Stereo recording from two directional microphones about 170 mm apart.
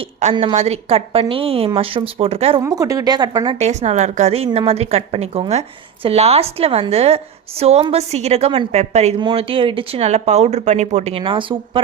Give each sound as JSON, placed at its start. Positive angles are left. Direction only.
{"t": 0.2, "sound": "a woman's voice", "side_deg": -40}
{"t": 2.6, "sound": "speech", "side_deg": -20}
{"t": 3.7, "sound": "a woman's voice", "side_deg": -40}